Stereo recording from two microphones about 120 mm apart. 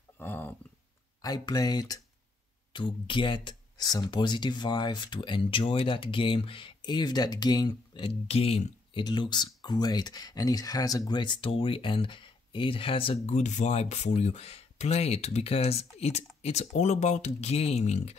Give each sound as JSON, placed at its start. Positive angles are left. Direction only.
{"t": 0.2, "sound": "a sound", "side_deg": 15}
{"t": 1.2, "sound": "speech", "side_deg": 35}
{"t": 9.0, "sound": "speech", "side_deg": 40}
{"t": 17.4, "sound": "speech", "side_deg": 60}